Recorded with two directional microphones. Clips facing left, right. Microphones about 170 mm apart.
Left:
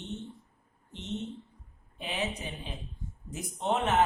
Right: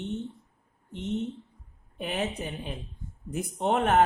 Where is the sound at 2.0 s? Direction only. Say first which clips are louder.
Right 4 dB; 50° right (ahead or behind).